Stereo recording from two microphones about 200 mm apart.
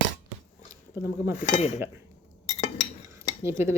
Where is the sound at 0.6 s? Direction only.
15° right (ahead or behind).